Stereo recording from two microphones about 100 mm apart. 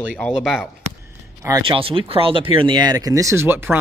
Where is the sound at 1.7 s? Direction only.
60° right (ahead or behind).